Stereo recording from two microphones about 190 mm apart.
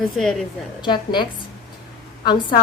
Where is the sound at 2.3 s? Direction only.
25° left (ahead or behind).